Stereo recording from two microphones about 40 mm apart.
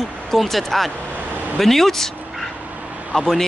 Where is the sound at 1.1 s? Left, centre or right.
Right.